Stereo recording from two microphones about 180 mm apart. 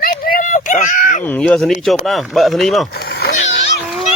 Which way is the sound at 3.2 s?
45° left (ahead or behind).